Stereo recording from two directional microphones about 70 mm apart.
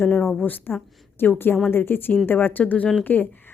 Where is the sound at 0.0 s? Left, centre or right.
Left.